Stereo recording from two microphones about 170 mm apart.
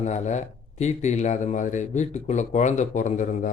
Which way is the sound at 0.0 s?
45° left (ahead or behind).